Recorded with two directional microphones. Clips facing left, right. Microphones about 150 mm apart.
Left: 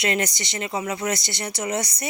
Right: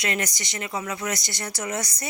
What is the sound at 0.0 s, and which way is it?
Speech, 25° left (ahead or behind).